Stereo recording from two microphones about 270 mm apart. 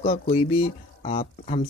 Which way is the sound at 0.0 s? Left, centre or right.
Left.